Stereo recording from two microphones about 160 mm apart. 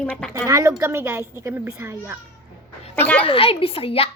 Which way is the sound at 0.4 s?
20° right (ahead or behind).